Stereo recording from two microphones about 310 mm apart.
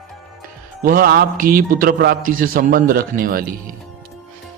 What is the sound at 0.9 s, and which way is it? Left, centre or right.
A man's voice, right.